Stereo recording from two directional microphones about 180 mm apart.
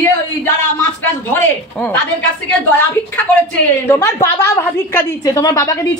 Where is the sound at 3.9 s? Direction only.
15° left (ahead or behind).